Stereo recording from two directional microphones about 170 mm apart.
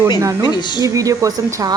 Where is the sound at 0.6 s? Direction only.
25° left (ahead or behind).